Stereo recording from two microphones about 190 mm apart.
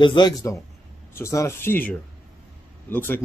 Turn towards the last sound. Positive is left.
turn(degrees=10)  # may be behind; listen again after turning